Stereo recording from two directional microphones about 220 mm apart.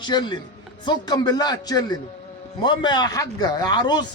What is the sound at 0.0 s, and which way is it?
Speech, 20° left (ahead or behind).